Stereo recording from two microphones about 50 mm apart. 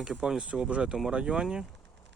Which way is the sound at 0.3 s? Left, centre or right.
Centre.